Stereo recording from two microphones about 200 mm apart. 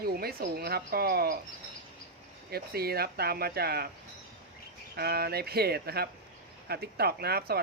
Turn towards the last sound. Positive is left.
turn(degrees=-50)  # may be behind; listen again after turning